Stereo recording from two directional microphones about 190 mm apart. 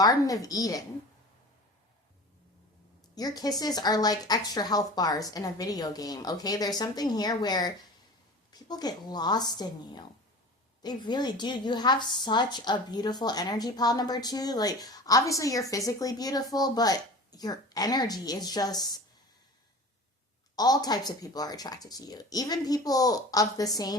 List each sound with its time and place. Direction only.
0.0 s a woman's voice: 20° left (ahead or behind)
3.2 s a woman's voice: 20° left (ahead or behind)
20.6 s a woman's voice: 20° left (ahead or behind)